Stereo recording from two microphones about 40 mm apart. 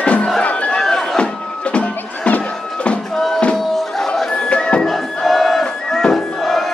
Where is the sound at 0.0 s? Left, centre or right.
Left.